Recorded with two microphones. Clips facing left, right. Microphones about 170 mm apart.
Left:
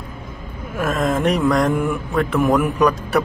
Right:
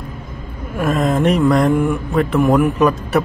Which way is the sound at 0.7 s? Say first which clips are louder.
Right 3 dB; centre (ahead or behind).